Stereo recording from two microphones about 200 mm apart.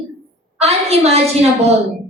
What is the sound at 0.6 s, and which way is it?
Speech, 30° right (ahead or behind).